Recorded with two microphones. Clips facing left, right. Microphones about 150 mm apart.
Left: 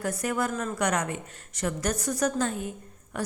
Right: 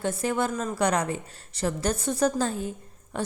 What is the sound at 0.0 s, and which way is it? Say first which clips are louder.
A woman's voice: right 2 dB; 25° right (ahead or behind).